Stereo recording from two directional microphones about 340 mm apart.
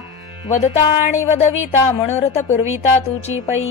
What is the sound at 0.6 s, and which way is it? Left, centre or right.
Music, centre.